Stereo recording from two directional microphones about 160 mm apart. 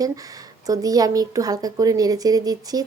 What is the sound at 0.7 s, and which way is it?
A woman's voice, 20° right (ahead or behind).